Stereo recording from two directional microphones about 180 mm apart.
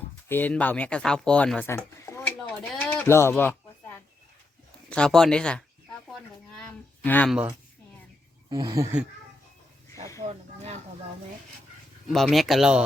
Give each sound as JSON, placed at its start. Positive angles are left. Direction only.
{"t": 0.3, "sound": "speech", "side_deg": 10}
{"t": 8.4, "sound": "speech", "side_deg": -20}
{"t": 10.2, "sound": "speech", "side_deg": -40}
{"t": 12.0, "sound": "speech", "side_deg": 0}